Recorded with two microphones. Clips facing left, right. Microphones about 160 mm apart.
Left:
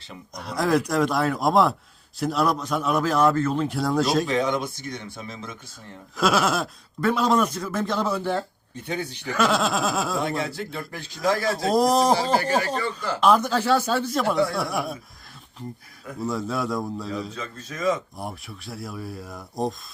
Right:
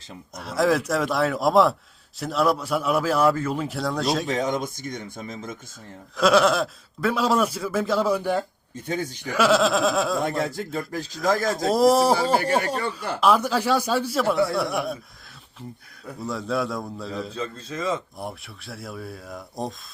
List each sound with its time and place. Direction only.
0.3 s speech: centre (ahead or behind)
4.4 s speech: 45° right (ahead or behind)
6.1 s speech: centre (ahead or behind)
8.7 s speech: 45° right (ahead or behind)
9.2 s speech: 10° right (ahead or behind)
10.2 s speech: 45° right (ahead or behind)
11.7 s speech: centre (ahead or behind)
16.2 s speech: centre (ahead or behind)
17.3 s a man's voice: 30° right (ahead or behind)
18.2 s speech: centre (ahead or behind)